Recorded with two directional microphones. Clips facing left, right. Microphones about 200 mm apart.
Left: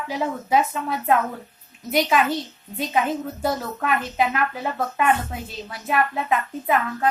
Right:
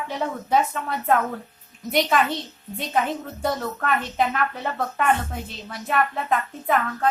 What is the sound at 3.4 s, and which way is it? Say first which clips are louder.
A woman's voice: left 1 dB; 5° left (ahead or behind).